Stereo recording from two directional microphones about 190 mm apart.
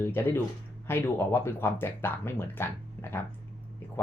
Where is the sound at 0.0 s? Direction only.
10° left (ahead or behind).